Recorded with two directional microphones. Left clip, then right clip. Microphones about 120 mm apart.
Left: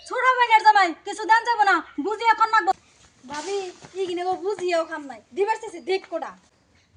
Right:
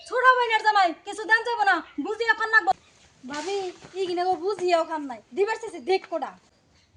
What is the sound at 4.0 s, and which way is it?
A woman's voice, 20° right (ahead or behind).